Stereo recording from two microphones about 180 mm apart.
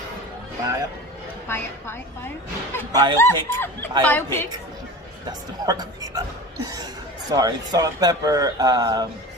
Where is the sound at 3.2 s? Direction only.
15° left (ahead or behind).